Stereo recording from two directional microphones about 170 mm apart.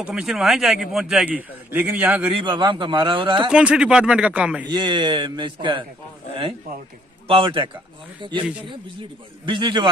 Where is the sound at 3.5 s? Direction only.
5° right (ahead or behind).